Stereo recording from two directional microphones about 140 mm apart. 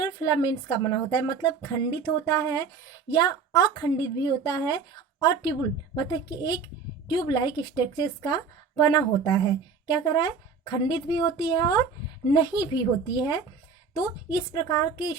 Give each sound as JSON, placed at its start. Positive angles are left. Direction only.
{"t": 0.0, "sound": "a woman's voice", "side_deg": 25}